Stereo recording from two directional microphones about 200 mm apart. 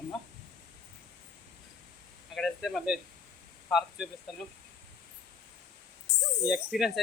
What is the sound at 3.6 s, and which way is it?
Insect, centre (ahead or behind).